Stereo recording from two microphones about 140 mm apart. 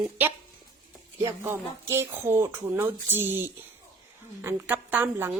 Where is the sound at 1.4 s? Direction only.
20° right (ahead or behind).